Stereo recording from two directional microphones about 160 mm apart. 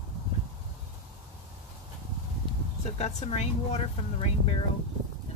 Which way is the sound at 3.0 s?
45° left (ahead or behind).